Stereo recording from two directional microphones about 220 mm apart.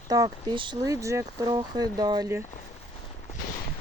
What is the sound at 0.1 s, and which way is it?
Speech, 20° right (ahead or behind).